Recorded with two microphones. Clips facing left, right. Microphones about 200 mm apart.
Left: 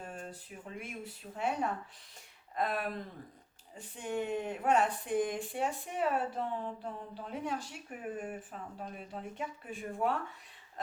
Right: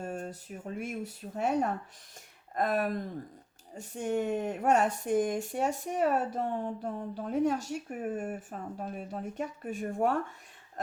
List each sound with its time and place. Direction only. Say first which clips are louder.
0.0 s speech: right 7 dB; 45° right (ahead or behind)